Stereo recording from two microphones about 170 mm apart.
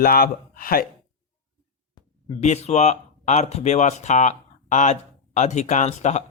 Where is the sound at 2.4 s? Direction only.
40° left (ahead or behind).